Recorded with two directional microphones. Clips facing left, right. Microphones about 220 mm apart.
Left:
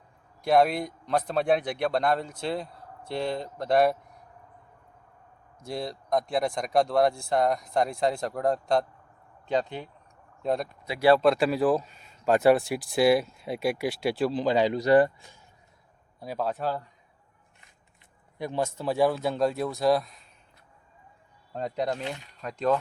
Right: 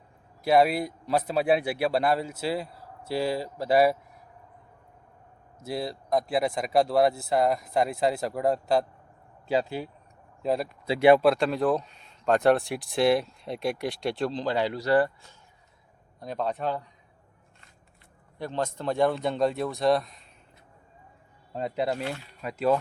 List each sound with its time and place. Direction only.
0.4 s speech: 5° right (ahead or behind)
5.6 s speech: 5° right (ahead or behind)
10.8 s speech: 25° right (ahead or behind)
11.2 s speech: centre (ahead or behind)
16.2 s speech: 5° left (ahead or behind)
18.3 s speech: 10° left (ahead or behind)
21.5 s speech: 5° right (ahead or behind)